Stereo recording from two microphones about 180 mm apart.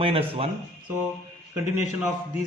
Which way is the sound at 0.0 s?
30° right (ahead or behind).